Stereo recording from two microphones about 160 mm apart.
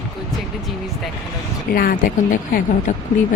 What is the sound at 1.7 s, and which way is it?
A woman's voice, 65° left (ahead or behind).